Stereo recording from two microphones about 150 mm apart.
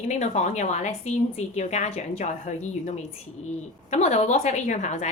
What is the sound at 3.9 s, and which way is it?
Speech, 50° left (ahead or behind).